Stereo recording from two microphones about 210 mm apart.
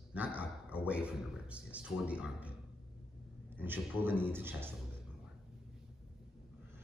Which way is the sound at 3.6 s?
10° right (ahead or behind).